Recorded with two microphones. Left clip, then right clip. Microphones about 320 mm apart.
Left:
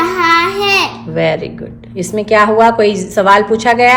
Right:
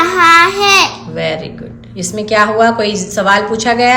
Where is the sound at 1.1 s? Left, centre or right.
Left.